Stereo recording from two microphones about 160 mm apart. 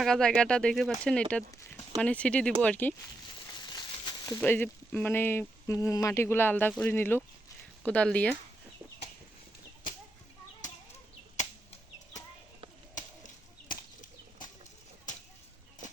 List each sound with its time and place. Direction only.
0.0 s speech: 5° left (ahead or behind)
4.4 s speech: 10° left (ahead or behind)